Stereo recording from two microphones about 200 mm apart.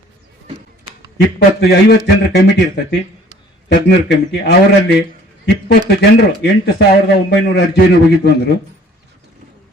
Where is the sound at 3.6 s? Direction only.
55° left (ahead or behind).